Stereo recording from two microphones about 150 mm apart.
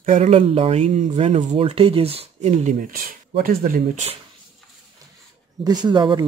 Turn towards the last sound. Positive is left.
turn(degrees=-30)  # may be behind; listen again after turning